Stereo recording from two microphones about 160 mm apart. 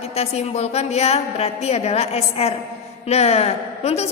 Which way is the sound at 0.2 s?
40° left (ahead or behind).